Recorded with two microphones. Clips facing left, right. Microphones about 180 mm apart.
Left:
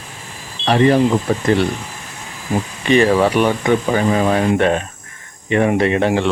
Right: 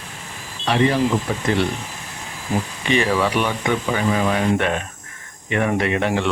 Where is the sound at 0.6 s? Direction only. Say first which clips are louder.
Left 5 dB; 45° left (ahead or behind).